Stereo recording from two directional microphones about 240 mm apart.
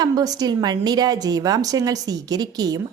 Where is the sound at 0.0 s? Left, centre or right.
Centre.